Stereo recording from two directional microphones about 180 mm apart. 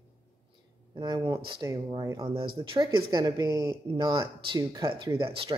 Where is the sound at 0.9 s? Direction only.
25° right (ahead or behind).